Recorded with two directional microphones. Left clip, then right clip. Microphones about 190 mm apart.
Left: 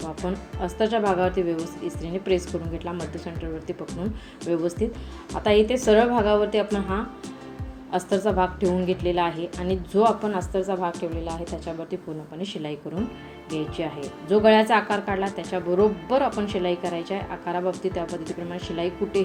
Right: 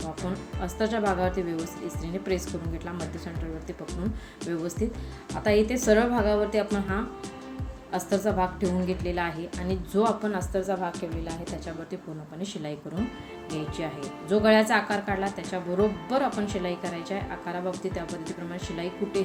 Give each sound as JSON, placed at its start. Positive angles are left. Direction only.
{"t": 0.0, "sound": "a woman's voice", "side_deg": 0}
{"t": 4.4, "sound": "a woman's voice", "side_deg": 0}
{"t": 13.5, "sound": "a woman's voice", "side_deg": 0}